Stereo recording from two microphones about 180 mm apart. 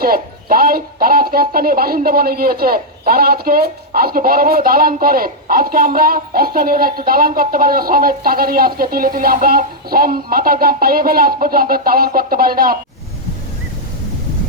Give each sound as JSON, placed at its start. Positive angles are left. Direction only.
{"t": 0.0, "sound": "speech", "side_deg": -55}